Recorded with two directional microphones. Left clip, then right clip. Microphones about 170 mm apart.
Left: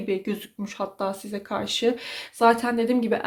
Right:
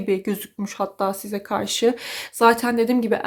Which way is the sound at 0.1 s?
40° right (ahead or behind).